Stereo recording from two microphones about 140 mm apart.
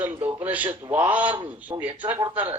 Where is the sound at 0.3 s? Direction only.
10° right (ahead or behind).